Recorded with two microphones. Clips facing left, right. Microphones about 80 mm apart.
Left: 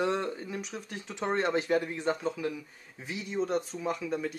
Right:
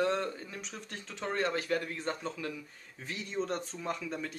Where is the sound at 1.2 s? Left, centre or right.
Left.